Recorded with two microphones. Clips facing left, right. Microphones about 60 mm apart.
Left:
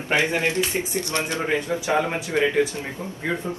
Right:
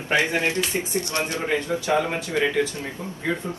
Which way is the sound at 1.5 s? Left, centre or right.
Left.